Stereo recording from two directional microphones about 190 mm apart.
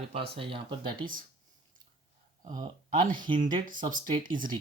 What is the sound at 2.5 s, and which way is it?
Speech, 20° right (ahead or behind).